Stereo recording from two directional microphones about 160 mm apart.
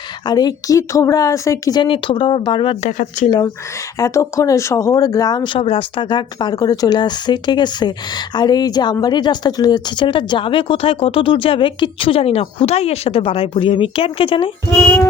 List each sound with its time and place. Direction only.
0.3 s speech: 25° left (ahead or behind)
2.8 s speech: 50° left (ahead or behind)
3.2 s speech: 25° left (ahead or behind)
5.5 s speech: 35° left (ahead or behind)
14.7 s music: 10° left (ahead or behind)